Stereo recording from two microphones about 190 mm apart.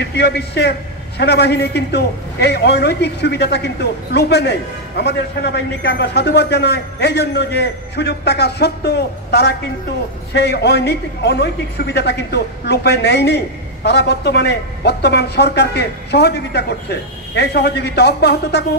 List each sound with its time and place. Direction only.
0.0 s a man's voice: 60° left (ahead or behind)